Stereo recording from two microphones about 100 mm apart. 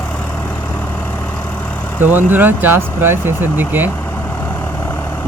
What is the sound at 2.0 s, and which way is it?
Speech, 20° right (ahead or behind).